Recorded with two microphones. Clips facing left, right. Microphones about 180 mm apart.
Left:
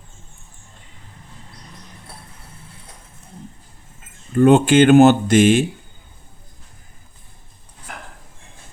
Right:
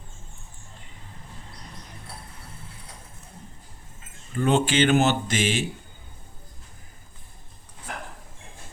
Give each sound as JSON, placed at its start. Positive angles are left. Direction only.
{"t": 4.4, "sound": "speech", "side_deg": 50}